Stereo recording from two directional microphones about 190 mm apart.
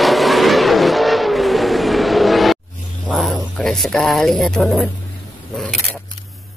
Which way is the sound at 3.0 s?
5° left (ahead or behind).